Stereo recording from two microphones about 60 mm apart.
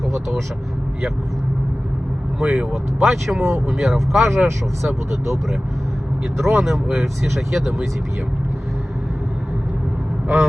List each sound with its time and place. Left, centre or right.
0.1 s speech: centre
2.4 s speech: centre
5.1 s speech: right
6.3 s speech: centre